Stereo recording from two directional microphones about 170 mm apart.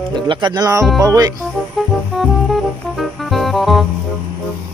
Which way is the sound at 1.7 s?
Centre (ahead or behind).